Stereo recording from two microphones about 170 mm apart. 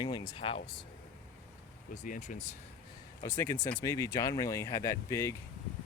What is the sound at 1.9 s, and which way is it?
Speech, 45° left (ahead or behind).